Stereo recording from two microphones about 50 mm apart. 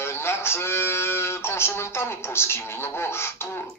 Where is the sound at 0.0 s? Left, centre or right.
Left.